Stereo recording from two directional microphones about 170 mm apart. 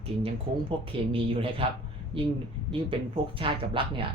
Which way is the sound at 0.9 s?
30° right (ahead or behind).